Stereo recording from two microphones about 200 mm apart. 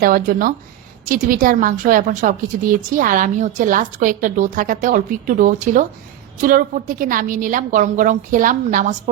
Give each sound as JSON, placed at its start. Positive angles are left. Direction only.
{"t": 0.0, "sound": "a woman's voice", "side_deg": -45}